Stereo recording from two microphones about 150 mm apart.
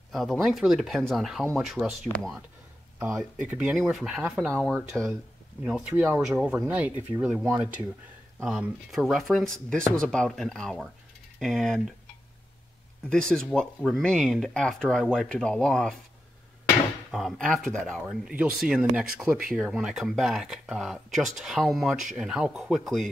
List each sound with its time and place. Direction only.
0.1 s speech: centre (ahead or behind)
4.5 s speech: 5° left (ahead or behind)
13.1 s speech: 5° left (ahead or behind)
17.1 s speech: 5° left (ahead or behind)